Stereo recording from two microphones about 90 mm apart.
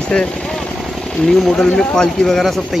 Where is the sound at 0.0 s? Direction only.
10° left (ahead or behind).